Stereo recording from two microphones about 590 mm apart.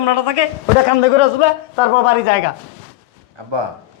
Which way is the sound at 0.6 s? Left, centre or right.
Left.